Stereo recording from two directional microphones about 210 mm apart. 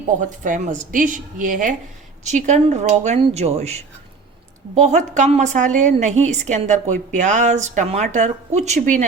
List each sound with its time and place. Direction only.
0.2 s a woman's voice: 35° right (ahead or behind)